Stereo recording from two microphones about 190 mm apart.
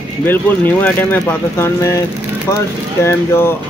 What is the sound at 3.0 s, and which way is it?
Speech, 15° left (ahead or behind).